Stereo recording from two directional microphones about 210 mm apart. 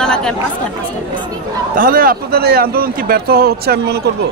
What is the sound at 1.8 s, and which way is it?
A man's voice, 45° right (ahead or behind).